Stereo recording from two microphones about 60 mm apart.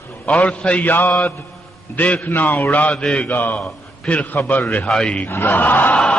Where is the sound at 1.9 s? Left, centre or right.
Left.